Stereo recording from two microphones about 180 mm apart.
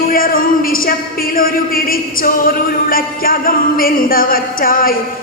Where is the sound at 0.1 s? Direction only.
50° left (ahead or behind).